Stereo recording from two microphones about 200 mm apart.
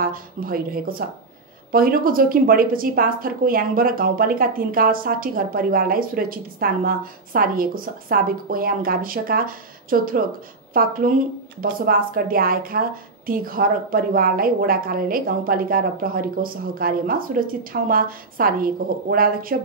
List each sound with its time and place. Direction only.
0.0 s a woman's voice: 45° right (ahead or behind)